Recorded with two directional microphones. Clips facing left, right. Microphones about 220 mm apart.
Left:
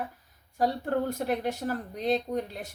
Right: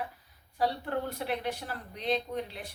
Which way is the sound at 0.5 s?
45° left (ahead or behind).